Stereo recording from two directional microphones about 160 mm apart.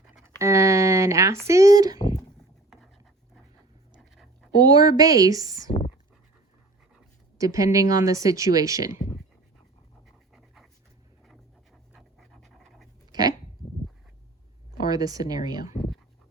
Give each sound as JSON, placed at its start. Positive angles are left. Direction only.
{"t": 0.2, "sound": "a sound", "side_deg": -15}
{"t": 3.9, "sound": "a sound", "side_deg": 0}
{"t": 4.5, "sound": "speech", "side_deg": -25}
{"t": 7.3, "sound": "speech", "side_deg": -20}
{"t": 10.3, "sound": "dog", "side_deg": 0}
{"t": 11.9, "sound": "pant", "side_deg": 0}
{"t": 13.1, "sound": "dog", "side_deg": -25}
{"t": 14.8, "sound": "speech", "side_deg": -25}